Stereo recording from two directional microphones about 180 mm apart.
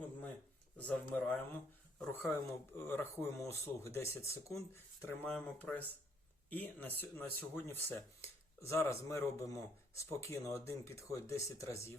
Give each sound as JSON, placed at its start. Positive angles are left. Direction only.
{"t": 0.8, "sound": "speech", "side_deg": 5}